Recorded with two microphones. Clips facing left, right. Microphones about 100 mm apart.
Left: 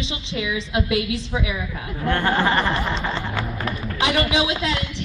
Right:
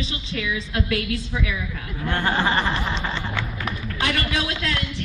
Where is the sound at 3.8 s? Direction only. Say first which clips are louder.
Left 5 dB; 20° left (ahead or behind).